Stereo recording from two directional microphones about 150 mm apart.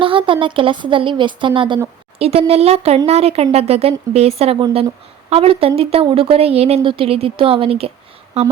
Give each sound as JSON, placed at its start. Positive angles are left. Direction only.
{"t": 0.0, "sound": "speech", "side_deg": -35}